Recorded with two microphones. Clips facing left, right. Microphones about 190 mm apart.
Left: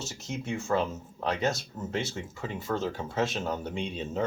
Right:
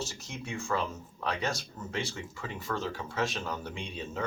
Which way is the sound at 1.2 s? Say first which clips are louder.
Left 4 dB; 20° left (ahead or behind).